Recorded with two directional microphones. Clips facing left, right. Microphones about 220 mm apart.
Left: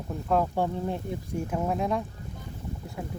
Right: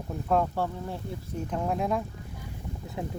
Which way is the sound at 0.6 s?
20° left (ahead or behind).